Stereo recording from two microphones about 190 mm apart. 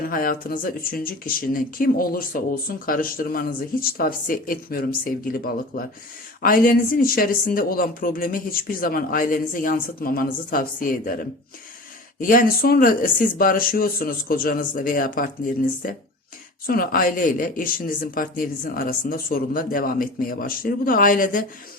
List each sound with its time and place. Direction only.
0.0 s speech: 50° left (ahead or behind)
12.2 s speech: 45° left (ahead or behind)